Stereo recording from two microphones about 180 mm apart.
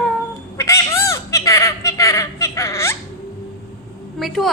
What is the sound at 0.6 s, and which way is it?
Bird, 15° left (ahead or behind).